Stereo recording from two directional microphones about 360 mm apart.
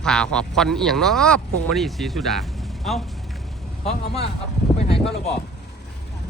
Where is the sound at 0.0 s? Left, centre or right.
Centre.